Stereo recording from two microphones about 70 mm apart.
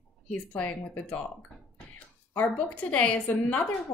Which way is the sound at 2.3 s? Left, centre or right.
Centre.